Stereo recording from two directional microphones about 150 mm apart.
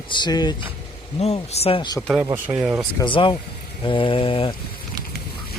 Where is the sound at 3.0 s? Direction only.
35° left (ahead or behind).